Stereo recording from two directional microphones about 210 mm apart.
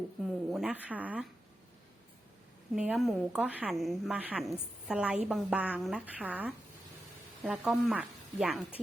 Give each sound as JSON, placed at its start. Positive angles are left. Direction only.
{"t": 0.5, "sound": "speech", "side_deg": -5}
{"t": 2.7, "sound": "a woman's voice", "side_deg": 0}